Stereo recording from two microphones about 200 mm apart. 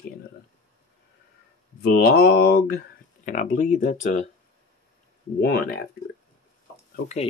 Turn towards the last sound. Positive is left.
turn(degrees=35)  # may be behind; listen again after turning